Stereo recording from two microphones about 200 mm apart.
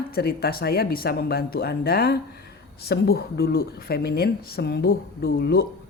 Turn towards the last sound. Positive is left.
turn(degrees=50)  # may be behind; listen again after turning